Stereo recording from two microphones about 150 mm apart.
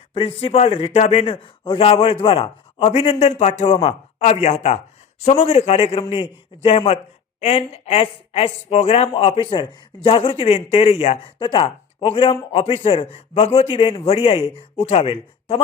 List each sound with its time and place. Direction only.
0.1 s a woman's voice: 40° left (ahead or behind)